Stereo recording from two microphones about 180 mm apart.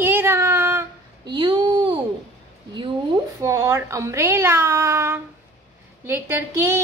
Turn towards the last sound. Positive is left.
turn(degrees=-15)  # may be behind; listen again after turning